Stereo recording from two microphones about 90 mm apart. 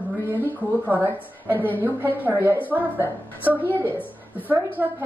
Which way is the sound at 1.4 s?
20° left (ahead or behind).